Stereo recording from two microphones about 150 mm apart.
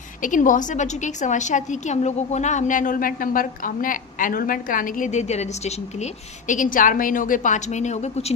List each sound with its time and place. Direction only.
0.2 s a woman's voice: 60° left (ahead or behind)
6.5 s a woman's voice: 60° left (ahead or behind)